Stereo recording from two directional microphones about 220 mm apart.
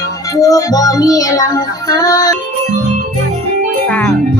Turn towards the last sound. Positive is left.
turn(degrees=5)  # may be behind; listen again after turning